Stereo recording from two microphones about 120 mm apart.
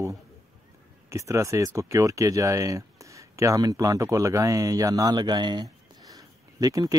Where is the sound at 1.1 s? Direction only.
25° right (ahead or behind).